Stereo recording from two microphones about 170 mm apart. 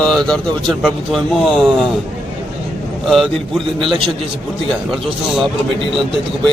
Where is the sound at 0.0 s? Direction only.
5° left (ahead or behind).